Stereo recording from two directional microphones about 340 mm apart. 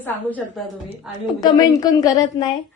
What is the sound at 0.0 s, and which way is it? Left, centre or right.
A woman's voice, centre.